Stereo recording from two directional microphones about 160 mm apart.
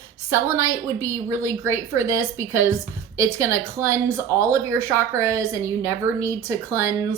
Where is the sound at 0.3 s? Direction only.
20° right (ahead or behind).